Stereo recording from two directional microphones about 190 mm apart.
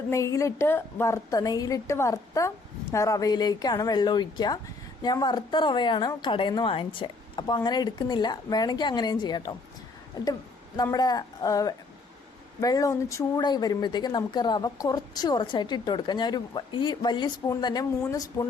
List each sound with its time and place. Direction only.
0.1 s a woman's voice: 15° left (ahead or behind)
10.9 s speech: 20° left (ahead or behind)